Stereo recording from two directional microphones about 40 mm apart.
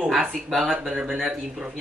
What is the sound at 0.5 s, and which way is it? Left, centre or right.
Speech, centre.